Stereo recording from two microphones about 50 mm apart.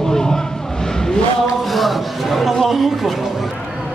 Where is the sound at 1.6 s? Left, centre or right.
Centre.